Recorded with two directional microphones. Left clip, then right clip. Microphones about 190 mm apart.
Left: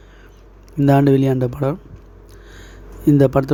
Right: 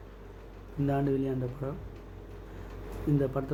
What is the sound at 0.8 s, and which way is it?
Speech, 55° left (ahead or behind).